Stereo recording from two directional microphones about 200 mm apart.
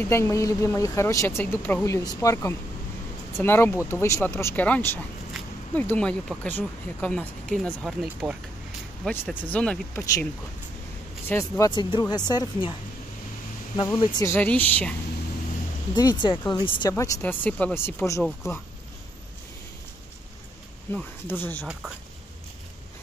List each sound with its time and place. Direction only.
0.0 s a woman's voice: 15° left (ahead or behind)
11.2 s speech: 15° left (ahead or behind)
13.7 s a woman's voice: 20° left (ahead or behind)
15.9 s a woman's voice: 20° left (ahead or behind)
18.2 s speech: centre (ahead or behind)
20.9 s a woman's voice: 10° left (ahead or behind)